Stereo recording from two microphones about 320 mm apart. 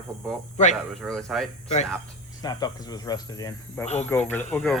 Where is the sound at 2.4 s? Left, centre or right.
Centre.